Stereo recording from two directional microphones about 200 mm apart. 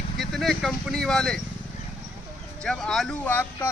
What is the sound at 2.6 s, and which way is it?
Speech, 5° left (ahead or behind).